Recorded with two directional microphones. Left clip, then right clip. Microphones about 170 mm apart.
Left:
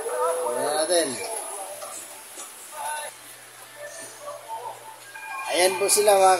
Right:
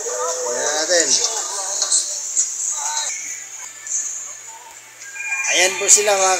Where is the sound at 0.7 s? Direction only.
15° left (ahead or behind).